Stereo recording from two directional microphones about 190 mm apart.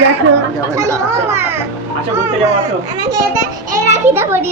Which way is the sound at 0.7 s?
15° right (ahead or behind).